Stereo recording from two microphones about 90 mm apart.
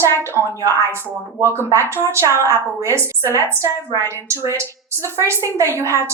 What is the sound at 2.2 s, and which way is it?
Speech, 30° left (ahead or behind).